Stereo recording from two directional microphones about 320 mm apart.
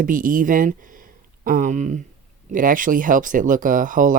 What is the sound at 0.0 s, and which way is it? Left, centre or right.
Speech, right.